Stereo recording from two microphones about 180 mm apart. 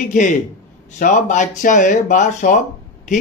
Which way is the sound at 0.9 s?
45° left (ahead or behind).